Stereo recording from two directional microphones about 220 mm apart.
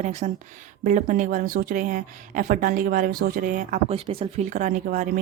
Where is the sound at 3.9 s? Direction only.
25° right (ahead or behind).